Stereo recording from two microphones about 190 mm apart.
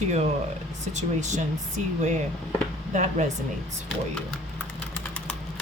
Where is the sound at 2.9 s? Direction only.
40° right (ahead or behind).